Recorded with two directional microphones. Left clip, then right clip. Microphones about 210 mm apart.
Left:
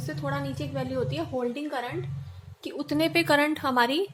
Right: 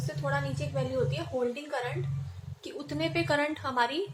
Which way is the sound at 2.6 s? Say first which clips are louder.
Left 6 dB; 50° left (ahead or behind).